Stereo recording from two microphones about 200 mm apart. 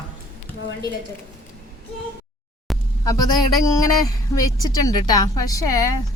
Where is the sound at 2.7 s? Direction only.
Centre (ahead or behind).